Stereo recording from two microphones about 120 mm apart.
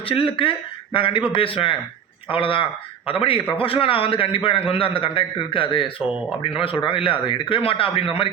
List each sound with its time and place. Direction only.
0.0 s speech: 50° left (ahead or behind)